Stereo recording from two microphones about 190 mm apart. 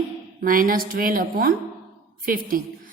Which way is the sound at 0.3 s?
45° right (ahead or behind).